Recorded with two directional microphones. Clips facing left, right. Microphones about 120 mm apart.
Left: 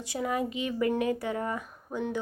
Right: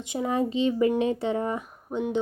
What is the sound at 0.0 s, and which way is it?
Speech, 20° right (ahead or behind).